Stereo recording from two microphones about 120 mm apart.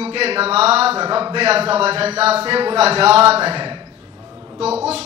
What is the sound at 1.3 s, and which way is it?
Speech, 55° right (ahead or behind).